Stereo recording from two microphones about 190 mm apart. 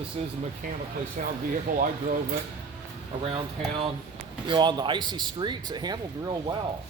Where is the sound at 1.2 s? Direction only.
40° right (ahead or behind).